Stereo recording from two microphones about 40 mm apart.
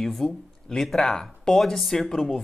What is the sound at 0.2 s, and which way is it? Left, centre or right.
Speech, centre.